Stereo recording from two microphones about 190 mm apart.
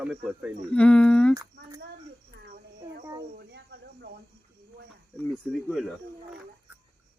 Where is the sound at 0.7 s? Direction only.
5° left (ahead or behind).